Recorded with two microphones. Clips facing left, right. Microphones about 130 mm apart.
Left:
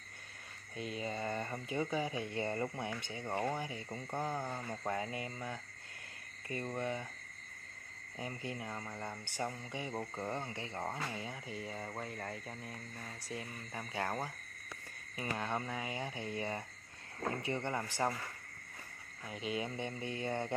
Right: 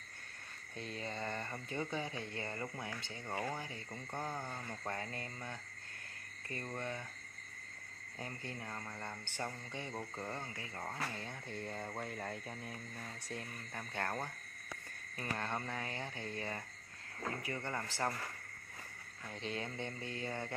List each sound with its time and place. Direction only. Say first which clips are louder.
0.7 s speech: left 4 dB; 10° left (ahead or behind)
8.2 s speech: left 4 dB; 15° left (ahead or behind)
11.1 s speech: left 2 dB; 5° left (ahead or behind)
19.4 s speech: left 3 dB; 10° left (ahead or behind)